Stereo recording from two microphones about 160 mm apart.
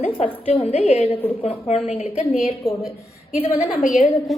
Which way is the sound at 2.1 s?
5° right (ahead or behind).